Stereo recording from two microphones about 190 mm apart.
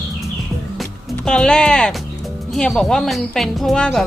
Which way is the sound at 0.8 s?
5° left (ahead or behind).